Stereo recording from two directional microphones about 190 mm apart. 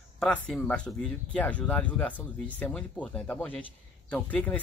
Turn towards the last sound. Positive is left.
turn(degrees=5)  # may be behind; listen again after turning